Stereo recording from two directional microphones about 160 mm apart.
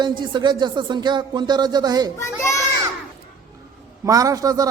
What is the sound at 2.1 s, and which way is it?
Speech, 15° left (ahead or behind).